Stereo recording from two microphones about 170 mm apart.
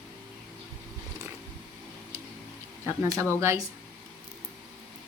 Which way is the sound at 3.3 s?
15° right (ahead or behind).